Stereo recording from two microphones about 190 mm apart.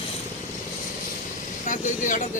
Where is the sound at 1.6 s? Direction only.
40° left (ahead or behind).